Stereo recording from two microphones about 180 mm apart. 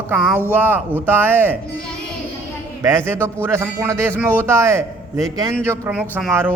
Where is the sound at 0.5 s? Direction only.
10° right (ahead or behind).